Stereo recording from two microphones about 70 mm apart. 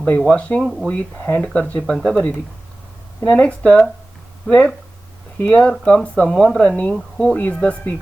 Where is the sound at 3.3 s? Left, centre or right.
Centre.